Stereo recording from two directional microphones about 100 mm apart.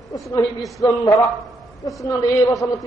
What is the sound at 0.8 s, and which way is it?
A man's voice, 35° left (ahead or behind).